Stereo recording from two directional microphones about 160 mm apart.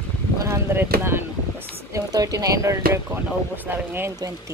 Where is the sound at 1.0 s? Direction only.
15° right (ahead or behind).